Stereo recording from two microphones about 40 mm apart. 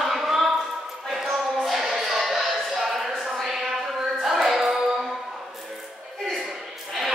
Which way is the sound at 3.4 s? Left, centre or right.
Centre.